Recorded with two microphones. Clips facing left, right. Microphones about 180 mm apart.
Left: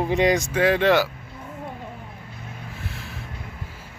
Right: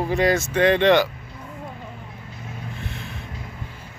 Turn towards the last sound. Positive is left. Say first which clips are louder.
# right 2 dB
turn(degrees=0)  # may be behind; listen again after turning